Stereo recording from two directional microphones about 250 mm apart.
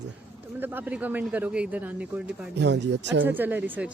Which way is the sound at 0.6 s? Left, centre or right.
Centre.